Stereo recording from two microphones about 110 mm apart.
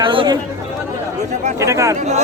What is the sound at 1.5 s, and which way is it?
Speech, 30° right (ahead or behind).